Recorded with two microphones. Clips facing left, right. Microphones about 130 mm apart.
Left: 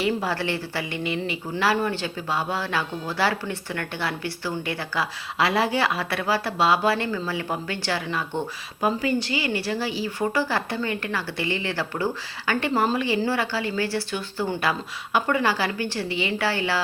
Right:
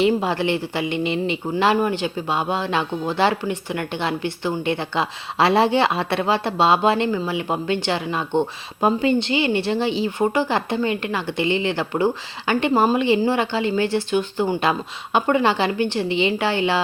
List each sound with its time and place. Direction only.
0.0 s speech: 20° right (ahead or behind)